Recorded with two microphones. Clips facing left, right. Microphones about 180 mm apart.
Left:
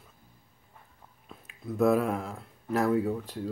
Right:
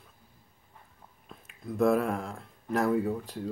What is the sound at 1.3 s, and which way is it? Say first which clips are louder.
Speech: left 1 dB; centre (ahead or behind).